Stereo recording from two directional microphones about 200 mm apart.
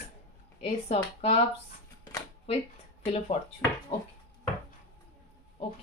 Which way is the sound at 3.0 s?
30° left (ahead or behind).